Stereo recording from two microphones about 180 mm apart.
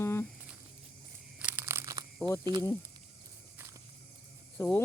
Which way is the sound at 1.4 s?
10° right (ahead or behind).